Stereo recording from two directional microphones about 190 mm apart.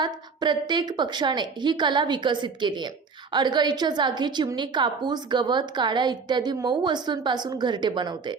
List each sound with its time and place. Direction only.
0.0 s a woman's voice: 25° right (ahead or behind)